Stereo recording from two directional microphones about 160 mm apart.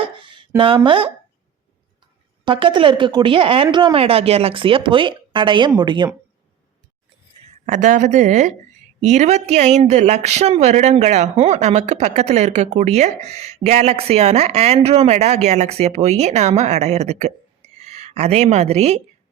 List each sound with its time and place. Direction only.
0.0 s a sound: 30° right (ahead or behind)
0.9 s speech: 35° right (ahead or behind)
2.4 s speech: 30° right (ahead or behind)
7.6 s a woman's voice: 55° right (ahead or behind)